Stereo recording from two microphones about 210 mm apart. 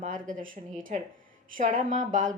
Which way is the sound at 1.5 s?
40° right (ahead or behind).